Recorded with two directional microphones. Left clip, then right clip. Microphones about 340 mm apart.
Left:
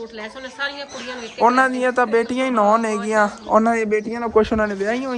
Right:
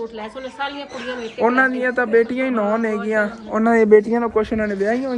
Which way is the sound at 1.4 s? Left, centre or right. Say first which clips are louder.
Left 1 dB; centre.